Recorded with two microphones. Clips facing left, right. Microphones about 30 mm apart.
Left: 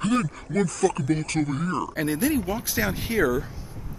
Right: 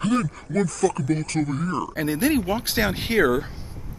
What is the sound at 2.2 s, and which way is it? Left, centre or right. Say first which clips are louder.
Speech: right 5 dB; right.